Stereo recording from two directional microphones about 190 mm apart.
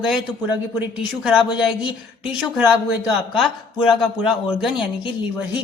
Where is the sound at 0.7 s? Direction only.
5° right (ahead or behind).